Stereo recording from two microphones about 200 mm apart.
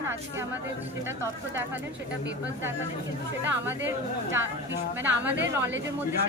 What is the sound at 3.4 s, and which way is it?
Speech, 10° right (ahead or behind).